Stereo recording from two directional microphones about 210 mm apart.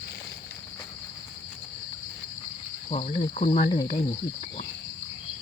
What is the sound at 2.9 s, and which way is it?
Speech, 30° left (ahead or behind).